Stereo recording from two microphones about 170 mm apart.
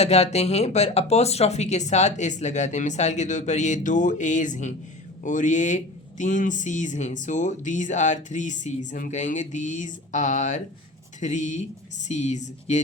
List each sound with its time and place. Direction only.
0.0 s speech: 40° left (ahead or behind)